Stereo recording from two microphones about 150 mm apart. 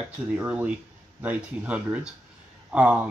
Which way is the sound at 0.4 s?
5° right (ahead or behind).